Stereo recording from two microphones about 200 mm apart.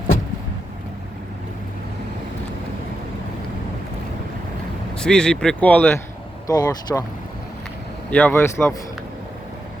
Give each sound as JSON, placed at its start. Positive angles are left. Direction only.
{"t": 4.9, "sound": "speech", "side_deg": 5}
{"t": 8.1, "sound": "speech", "side_deg": 10}